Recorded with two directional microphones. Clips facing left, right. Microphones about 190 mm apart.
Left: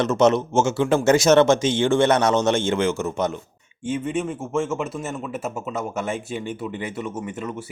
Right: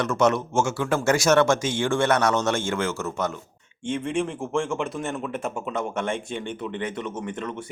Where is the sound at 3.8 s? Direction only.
5° left (ahead or behind).